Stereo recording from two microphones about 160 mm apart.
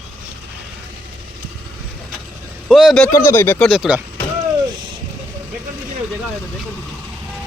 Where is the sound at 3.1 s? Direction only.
15° left (ahead or behind).